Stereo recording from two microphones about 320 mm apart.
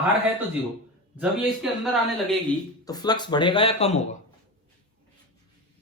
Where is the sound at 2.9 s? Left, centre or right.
Centre.